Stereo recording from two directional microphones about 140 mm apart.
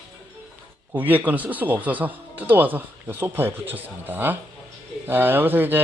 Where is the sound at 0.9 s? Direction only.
10° right (ahead or behind).